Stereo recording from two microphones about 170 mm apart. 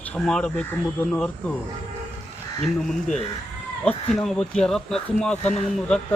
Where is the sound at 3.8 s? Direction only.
5° left (ahead or behind).